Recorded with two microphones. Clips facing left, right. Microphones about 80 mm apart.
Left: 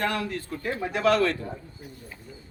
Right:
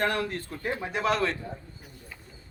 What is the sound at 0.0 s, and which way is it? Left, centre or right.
Speech, right.